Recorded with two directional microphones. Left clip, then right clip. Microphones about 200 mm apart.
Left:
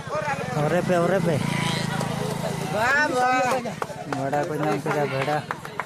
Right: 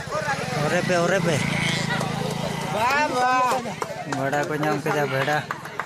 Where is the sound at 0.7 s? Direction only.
15° left (ahead or behind).